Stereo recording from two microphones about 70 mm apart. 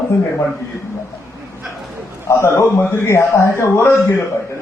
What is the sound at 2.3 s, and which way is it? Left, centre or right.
A man's voice, left.